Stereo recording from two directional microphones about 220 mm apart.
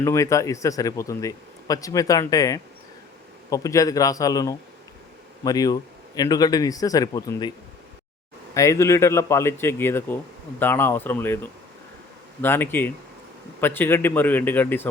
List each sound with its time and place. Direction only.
0.0 s speech: 15° left (ahead or behind)
8.5 s speech: 15° left (ahead or behind)
12.4 s speech: 10° left (ahead or behind)